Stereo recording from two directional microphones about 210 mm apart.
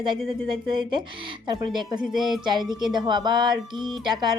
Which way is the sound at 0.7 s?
20° right (ahead or behind).